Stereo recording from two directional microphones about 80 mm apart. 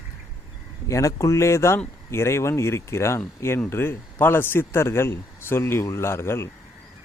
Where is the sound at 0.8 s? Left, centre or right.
Left.